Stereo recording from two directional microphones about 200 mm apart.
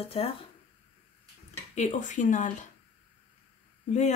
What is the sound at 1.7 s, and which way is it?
Speech, 40° left (ahead or behind).